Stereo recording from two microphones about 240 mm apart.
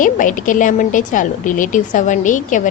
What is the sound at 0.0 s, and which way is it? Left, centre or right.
A woman's voice, left.